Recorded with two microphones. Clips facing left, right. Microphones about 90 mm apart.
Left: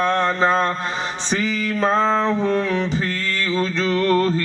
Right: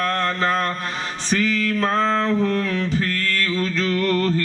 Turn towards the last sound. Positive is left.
turn(degrees=25)  # may be behind; listen again after turning